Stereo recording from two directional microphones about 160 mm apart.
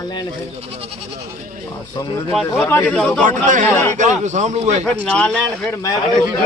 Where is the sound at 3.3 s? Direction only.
55° right (ahead or behind).